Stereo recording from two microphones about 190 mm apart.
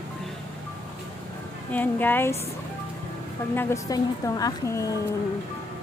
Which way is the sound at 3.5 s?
15° left (ahead or behind).